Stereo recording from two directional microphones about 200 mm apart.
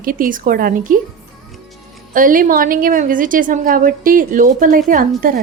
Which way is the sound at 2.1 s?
45° right (ahead or behind).